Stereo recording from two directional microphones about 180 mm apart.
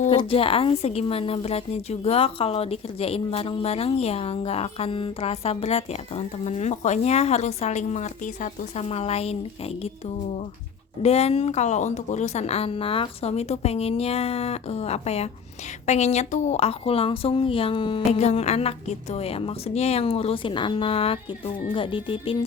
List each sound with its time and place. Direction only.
0.2 s a woman's voice: 30° left (ahead or behind)
11.0 s a woman's voice: 35° left (ahead or behind)